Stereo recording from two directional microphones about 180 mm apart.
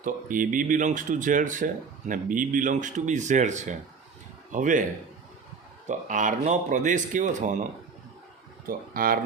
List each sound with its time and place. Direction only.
0.0 s speech: 50° right (ahead or behind)
5.9 s speech: 45° right (ahead or behind)